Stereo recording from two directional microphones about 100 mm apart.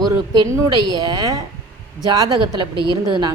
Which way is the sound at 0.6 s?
45° right (ahead or behind).